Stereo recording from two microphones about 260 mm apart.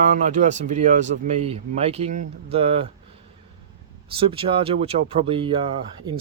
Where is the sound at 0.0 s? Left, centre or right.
Right.